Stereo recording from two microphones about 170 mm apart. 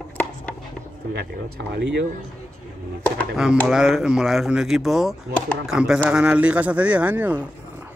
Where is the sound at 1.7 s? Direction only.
90° right.